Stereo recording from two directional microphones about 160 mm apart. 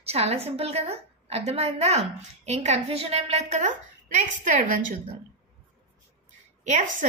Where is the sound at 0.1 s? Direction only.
40° right (ahead or behind).